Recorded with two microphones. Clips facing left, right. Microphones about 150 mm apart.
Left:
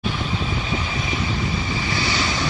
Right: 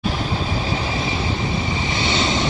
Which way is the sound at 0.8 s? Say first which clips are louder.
Right 3 dB; 30° right (ahead or behind).